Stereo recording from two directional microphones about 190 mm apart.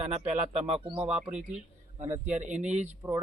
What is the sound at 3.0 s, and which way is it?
Speech, 15° right (ahead or behind).